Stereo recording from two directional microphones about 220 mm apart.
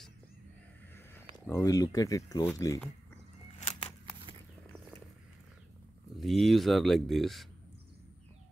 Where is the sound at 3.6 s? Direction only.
25° left (ahead or behind).